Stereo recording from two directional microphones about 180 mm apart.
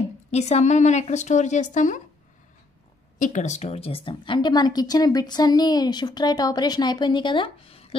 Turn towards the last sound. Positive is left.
turn(degrees=30)  # may be behind; listen again after turning